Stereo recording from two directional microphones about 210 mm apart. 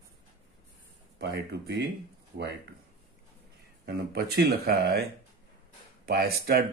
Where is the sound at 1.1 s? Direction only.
50° right (ahead or behind).